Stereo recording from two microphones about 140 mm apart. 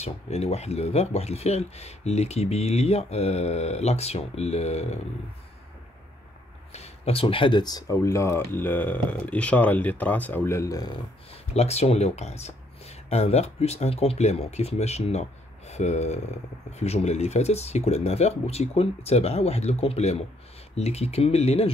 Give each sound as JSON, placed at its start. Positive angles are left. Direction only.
{"t": 0.0, "sound": "speech", "side_deg": 50}
{"t": 6.7, "sound": "speech", "side_deg": 45}
{"t": 11.5, "sound": "speech", "side_deg": 50}